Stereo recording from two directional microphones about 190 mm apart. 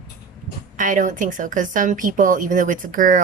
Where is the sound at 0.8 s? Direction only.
40° right (ahead or behind).